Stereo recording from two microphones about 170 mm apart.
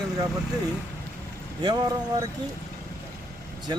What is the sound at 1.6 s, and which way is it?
Speech, 25° right (ahead or behind).